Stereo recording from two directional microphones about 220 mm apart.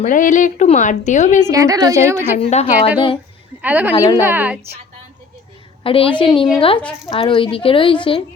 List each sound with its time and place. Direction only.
0.0 s a woman's voice: 35° left (ahead or behind)
1.5 s a woman's voice: 15° right (ahead or behind)
2.4 s a woman's voice: 30° left (ahead or behind)
3.6 s a woman's voice: 10° right (ahead or behind)
5.8 s a woman's voice: 25° left (ahead or behind)